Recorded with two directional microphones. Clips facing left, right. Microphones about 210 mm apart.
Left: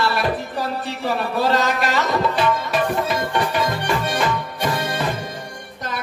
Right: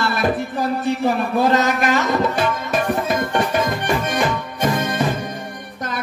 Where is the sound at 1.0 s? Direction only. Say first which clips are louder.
Right 2 dB; 50° right (ahead or behind).